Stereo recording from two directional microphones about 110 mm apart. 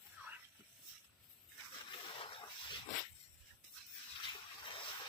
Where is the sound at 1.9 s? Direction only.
55° left (ahead or behind).